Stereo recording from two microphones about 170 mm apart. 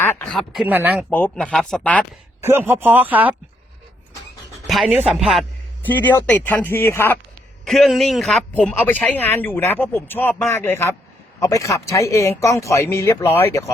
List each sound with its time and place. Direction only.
0.0 s a sound: 10° left (ahead or behind)
0.3 s speech: centre (ahead or behind)
1.1 s a man's voice: 10° left (ahead or behind)
2.4 s speech: 15° right (ahead or behind)
4.6 s a man's voice: centre (ahead or behind)
5.8 s a man's voice: 10° left (ahead or behind)
7.6 s a man's voice: centre (ahead or behind)